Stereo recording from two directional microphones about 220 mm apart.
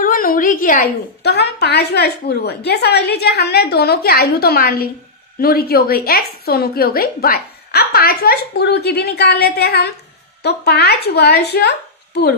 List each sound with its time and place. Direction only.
0.0 s a woman's voice: 40° left (ahead or behind)